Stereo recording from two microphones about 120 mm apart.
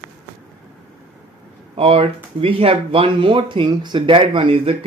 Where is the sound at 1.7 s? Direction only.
50° right (ahead or behind).